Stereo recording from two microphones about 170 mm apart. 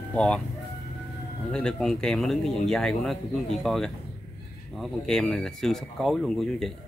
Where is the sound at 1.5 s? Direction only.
5° left (ahead or behind).